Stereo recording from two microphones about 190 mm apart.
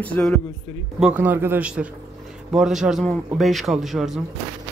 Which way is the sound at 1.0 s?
10° right (ahead or behind).